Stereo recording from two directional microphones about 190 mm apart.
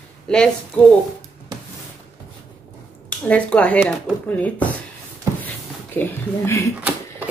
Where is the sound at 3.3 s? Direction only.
5° left (ahead or behind).